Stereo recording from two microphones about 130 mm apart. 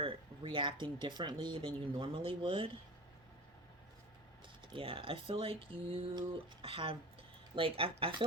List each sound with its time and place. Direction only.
0.0 s speech: 40° right (ahead or behind)
4.7 s speech: 40° right (ahead or behind)